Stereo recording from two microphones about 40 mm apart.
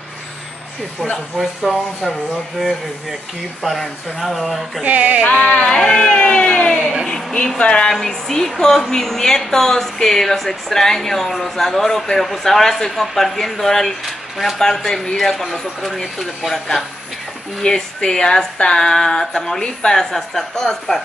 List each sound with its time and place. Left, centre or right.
1.4 s speech: centre
3.6 s speech: centre
4.8 s music: right
5.3 s speech: left
5.7 s a woman's voice: centre
6.1 s speech: left
7.9 s a woman's voice: centre
14.0 s speech: centre
14.6 s a woman's voice: centre
17.6 s a woman's voice: centre